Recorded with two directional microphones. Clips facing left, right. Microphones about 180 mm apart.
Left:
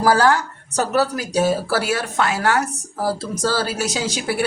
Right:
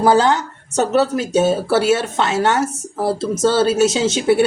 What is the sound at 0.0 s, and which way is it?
Speech, 20° right (ahead or behind).